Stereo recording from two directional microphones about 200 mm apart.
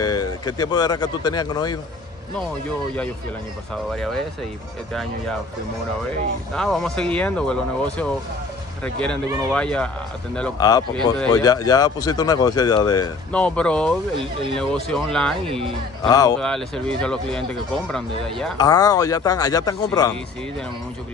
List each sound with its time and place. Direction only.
0.0 s speech: 20° left (ahead or behind)
3.9 s speech: 5° left (ahead or behind)
6.5 s speech: centre (ahead or behind)
10.6 s speech: 20° left (ahead or behind)
13.3 s speech: 5° left (ahead or behind)
16.0 s speech: 20° left (ahead or behind)
16.3 s speech: 5° left (ahead or behind)
18.6 s speech: 20° left (ahead or behind)